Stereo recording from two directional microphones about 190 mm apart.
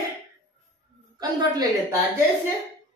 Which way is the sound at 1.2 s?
20° right (ahead or behind).